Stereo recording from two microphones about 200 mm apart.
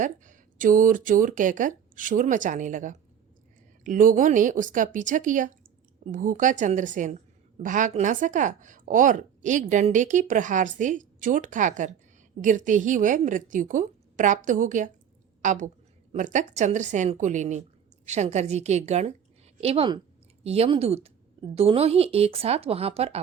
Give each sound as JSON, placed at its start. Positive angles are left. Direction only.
{"t": 0.0, "sound": "a woman's voice", "side_deg": -40}